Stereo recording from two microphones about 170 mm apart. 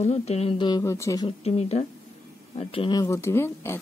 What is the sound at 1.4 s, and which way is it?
Speech, 40° left (ahead or behind).